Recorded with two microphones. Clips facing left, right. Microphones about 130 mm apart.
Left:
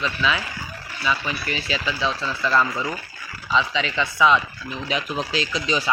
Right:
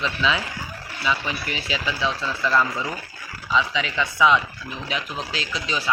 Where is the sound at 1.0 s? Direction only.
20° right (ahead or behind).